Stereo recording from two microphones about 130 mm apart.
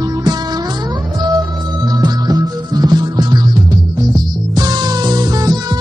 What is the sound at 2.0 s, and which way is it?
Music, 30° right (ahead or behind).